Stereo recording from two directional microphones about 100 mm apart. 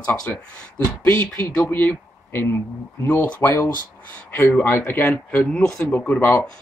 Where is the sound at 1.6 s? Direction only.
20° left (ahead or behind).